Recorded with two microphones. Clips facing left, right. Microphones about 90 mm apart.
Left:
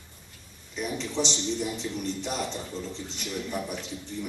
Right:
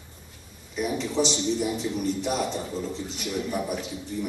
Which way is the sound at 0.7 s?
5° right (ahead or behind).